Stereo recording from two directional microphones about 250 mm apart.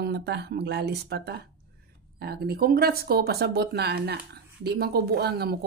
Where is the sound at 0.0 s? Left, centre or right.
Right.